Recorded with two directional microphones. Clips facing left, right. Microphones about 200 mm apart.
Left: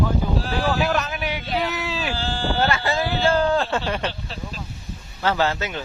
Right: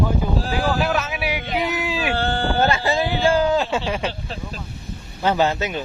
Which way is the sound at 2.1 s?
60° right (ahead or behind).